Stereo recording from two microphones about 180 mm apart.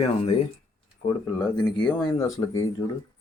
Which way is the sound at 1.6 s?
5° left (ahead or behind).